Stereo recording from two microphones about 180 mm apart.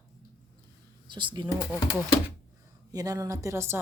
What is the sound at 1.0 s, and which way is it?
Speech, 25° right (ahead or behind).